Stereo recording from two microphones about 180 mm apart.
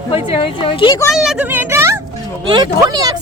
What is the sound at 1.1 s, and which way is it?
Speech, 5° right (ahead or behind).